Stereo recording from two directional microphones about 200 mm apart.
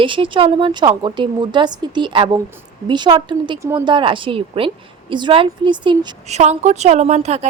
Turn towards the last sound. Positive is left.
turn(degrees=-35)  # may be behind; listen again after turning